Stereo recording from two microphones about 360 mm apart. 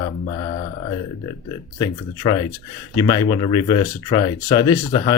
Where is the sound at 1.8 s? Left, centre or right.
Centre.